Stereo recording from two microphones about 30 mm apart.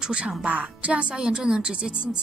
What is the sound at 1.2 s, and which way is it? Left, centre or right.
Speech, right.